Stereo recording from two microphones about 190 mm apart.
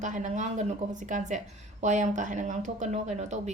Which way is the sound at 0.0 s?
40° right (ahead or behind).